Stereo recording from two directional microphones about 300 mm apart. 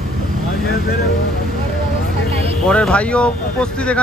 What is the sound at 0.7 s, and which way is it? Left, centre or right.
Speech, left.